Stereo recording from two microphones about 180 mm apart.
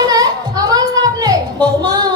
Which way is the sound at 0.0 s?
20° right (ahead or behind).